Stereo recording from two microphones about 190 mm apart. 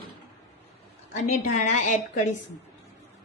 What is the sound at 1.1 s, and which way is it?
A woman's voice, 40° left (ahead or behind).